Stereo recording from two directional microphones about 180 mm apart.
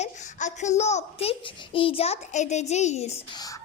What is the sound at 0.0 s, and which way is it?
A child's voice, 40° left (ahead or behind).